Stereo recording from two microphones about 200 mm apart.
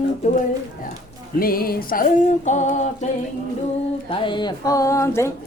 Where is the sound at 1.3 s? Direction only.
45° left (ahead or behind).